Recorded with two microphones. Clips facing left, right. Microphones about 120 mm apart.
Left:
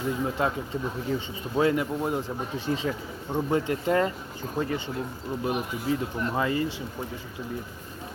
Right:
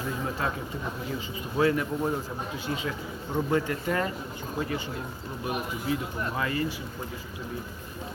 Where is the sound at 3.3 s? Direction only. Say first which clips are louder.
Left 1 dB; 20° left (ahead or behind).